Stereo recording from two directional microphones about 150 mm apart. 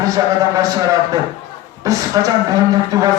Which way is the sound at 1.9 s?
25° right (ahead or behind).